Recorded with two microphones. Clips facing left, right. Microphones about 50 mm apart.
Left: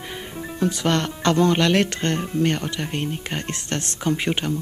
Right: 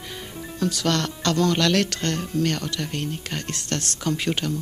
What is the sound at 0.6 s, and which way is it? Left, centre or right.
Speech, left.